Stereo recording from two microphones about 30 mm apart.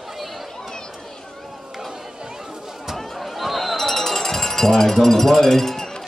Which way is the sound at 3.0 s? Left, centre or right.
Centre.